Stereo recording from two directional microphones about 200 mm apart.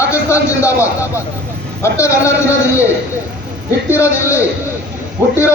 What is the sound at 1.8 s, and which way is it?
Speech, 15° left (ahead or behind).